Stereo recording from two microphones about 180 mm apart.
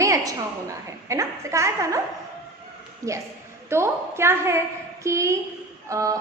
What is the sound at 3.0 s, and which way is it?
A woman's voice, 20° right (ahead or behind).